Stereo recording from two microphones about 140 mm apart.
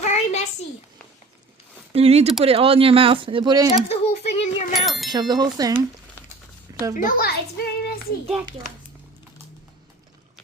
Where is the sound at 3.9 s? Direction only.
50° left (ahead or behind).